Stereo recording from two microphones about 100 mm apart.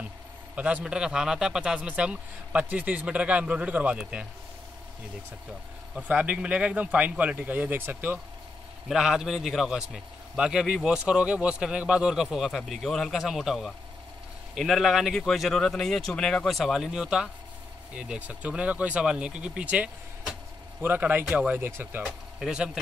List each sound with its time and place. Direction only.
0.6 s a man's voice: 15° right (ahead or behind)
5.9 s a man's voice: 15° right (ahead or behind)
8.8 s a man's voice: 5° right (ahead or behind); by 22.0 s 20° right (ahead or behind)
22.0 s speech: 5° right (ahead or behind)